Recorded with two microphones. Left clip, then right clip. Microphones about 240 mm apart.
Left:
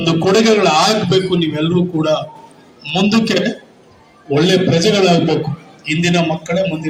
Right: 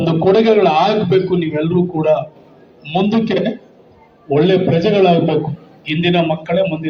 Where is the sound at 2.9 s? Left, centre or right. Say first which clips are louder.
Left 1 dB; left.